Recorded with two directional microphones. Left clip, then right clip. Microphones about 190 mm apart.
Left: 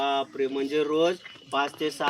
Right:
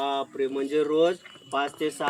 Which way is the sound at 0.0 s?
Centre (ahead or behind).